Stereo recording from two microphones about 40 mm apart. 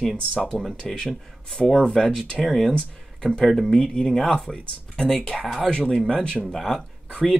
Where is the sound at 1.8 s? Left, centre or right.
Centre.